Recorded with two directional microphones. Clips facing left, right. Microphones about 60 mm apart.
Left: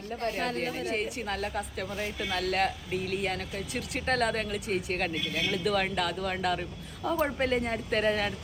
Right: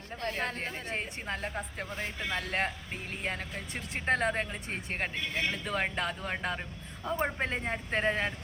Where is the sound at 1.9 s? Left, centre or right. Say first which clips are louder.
Left 2 dB; right.